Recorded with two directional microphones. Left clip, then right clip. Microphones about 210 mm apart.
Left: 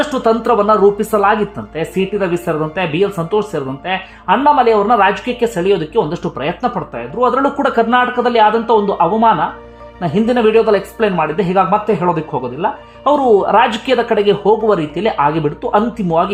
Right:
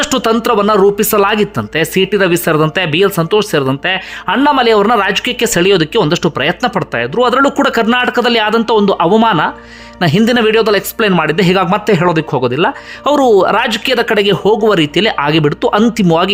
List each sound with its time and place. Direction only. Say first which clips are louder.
0.0 s speech: right 1 dB; 25° right (ahead or behind)